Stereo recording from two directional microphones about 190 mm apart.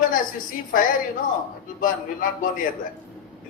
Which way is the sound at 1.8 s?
45° left (ahead or behind).